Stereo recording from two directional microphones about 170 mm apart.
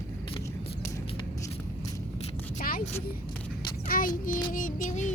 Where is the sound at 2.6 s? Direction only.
60° left (ahead or behind).